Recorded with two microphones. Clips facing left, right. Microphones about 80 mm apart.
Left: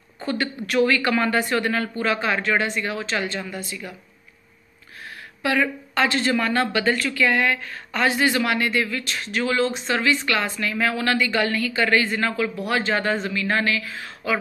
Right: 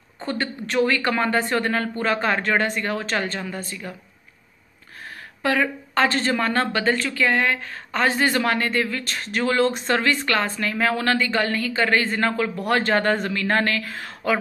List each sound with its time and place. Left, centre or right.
0.2 s a woman's voice: right
5.4 s a woman's voice: right